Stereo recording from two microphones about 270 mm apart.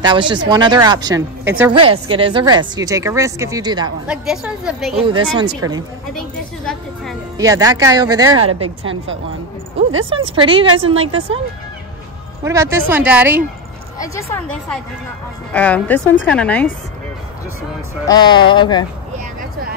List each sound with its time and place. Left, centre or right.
0.0 s a woman's voice: centre
1.7 s a woman's voice: centre
4.1 s a woman's voice: centre
5.0 s a woman's voice: centre
6.1 s a woman's voice: centre
7.3 s a woman's voice: centre
10.0 s speech: centre
12.4 s a woman's voice: centre
13.9 s a woman's voice: centre
18.0 s speech: centre